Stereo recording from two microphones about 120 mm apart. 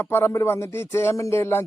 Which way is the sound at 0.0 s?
20° left (ahead or behind).